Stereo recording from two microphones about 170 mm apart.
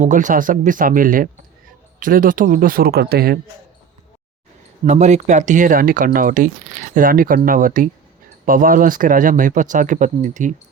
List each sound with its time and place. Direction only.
0.0 s speech: 50° right (ahead or behind); by 3.3 s 65° right (ahead or behind)
4.9 s speech: 45° right (ahead or behind)